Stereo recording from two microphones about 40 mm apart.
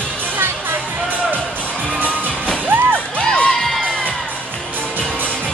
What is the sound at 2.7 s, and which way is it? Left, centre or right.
Music, right.